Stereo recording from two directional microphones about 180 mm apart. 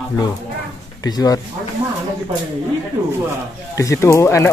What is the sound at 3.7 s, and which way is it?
Speech, 15° left (ahead or behind).